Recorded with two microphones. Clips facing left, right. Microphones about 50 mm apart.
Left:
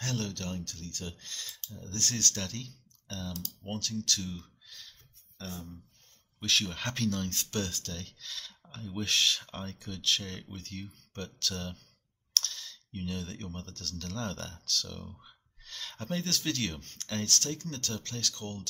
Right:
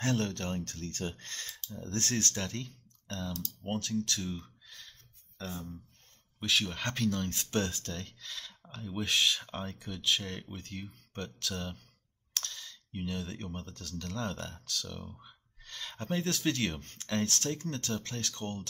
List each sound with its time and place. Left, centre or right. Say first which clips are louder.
0.0 s speech: right 4 dB; right
6.4 s speech: even; centre
7.5 s speech: right 4 dB; right